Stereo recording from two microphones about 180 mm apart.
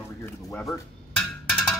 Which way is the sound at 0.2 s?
15° left (ahead or behind).